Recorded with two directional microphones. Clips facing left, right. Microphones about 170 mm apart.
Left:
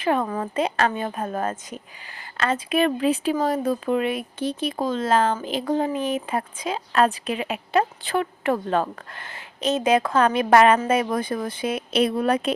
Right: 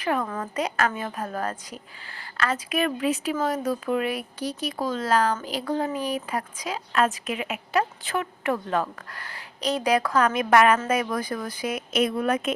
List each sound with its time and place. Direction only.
0.0 s speech: 25° left (ahead or behind)